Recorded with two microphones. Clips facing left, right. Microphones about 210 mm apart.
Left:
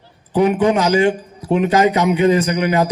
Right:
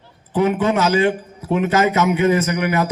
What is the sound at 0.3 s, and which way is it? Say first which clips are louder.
A man's voice: left 3 dB; 15° left (ahead or behind).